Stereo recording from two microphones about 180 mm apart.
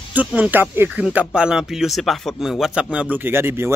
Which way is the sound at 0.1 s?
10° right (ahead or behind).